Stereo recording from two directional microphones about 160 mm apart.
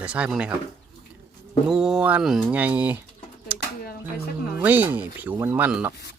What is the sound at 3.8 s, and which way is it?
Speech, 70° left (ahead or behind).